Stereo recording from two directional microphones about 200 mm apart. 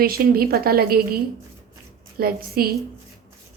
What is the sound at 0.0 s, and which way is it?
A woman's voice, 50° right (ahead or behind).